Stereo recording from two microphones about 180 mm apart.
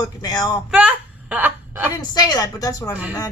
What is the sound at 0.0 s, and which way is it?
Speech, 20° left (ahead or behind).